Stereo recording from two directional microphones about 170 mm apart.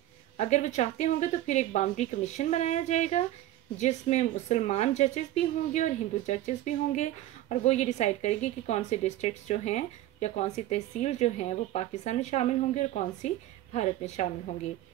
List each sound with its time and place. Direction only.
0.4 s speech: 45° left (ahead or behind)